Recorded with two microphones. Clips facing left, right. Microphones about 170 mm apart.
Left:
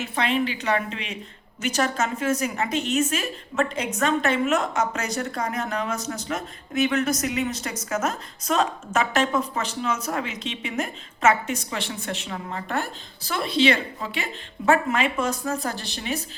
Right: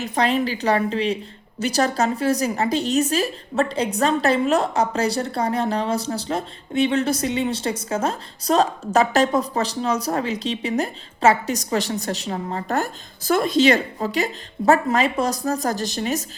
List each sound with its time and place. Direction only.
0.0 s a woman's voice: 40° right (ahead or behind)